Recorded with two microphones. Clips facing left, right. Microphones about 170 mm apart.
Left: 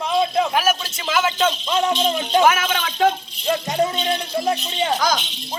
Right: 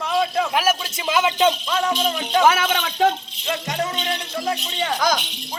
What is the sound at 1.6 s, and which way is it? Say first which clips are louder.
Music: left 2 dB; 25° left (ahead or behind).